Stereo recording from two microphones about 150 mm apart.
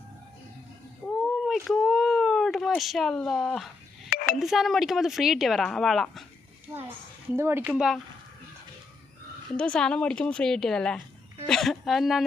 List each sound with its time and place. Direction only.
1.0 s a sound: centre (ahead or behind)
4.4 s speech: centre (ahead or behind)
7.3 s speech: 15° right (ahead or behind)
7.7 s speech: centre (ahead or behind)
9.6 s speech: 5° left (ahead or behind)